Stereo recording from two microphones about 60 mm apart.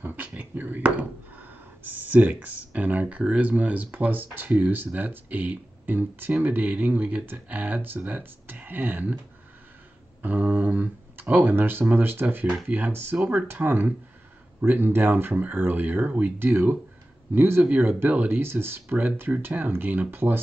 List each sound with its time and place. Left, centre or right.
0.0 s speech: right
10.2 s speech: right
13.1 s speech: right
13.5 s speech: right